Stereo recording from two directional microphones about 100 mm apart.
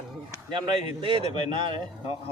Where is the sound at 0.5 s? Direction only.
55° right (ahead or behind).